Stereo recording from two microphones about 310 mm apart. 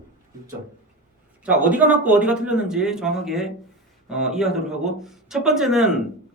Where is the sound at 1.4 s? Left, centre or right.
Centre.